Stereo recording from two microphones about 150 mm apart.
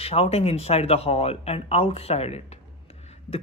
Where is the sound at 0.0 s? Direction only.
40° left (ahead or behind).